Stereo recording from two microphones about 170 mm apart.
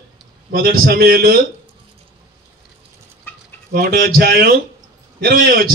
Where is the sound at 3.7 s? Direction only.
65° right (ahead or behind).